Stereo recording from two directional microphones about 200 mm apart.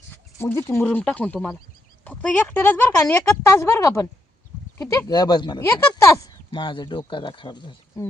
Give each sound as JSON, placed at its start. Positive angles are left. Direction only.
{"t": 0.3, "sound": "speech", "side_deg": 10}